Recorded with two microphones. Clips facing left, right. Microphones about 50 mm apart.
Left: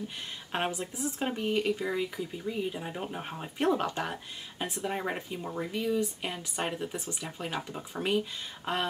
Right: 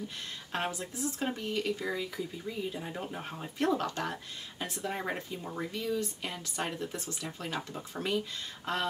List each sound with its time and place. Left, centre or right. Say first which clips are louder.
0.5 s speech: left 3 dB; left